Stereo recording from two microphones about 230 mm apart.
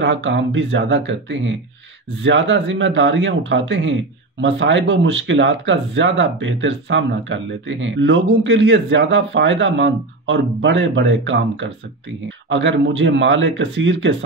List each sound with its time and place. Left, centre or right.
0.0 s speech: right